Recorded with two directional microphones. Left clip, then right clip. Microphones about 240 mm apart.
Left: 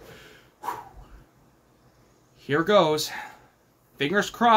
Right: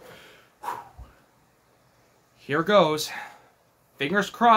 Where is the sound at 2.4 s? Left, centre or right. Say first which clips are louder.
Even; centre.